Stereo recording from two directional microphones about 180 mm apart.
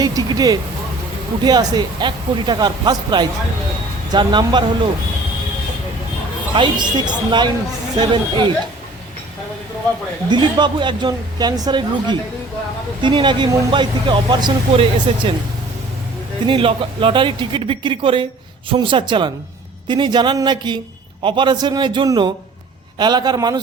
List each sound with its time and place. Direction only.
0.0 s a sound: 20° right (ahead or behind)
1.5 s speech: 25° right (ahead or behind)
6.5 s speech: 25° right (ahead or behind)
10.2 s speech: 25° right (ahead or behind)
16.5 s speech: 30° right (ahead or behind)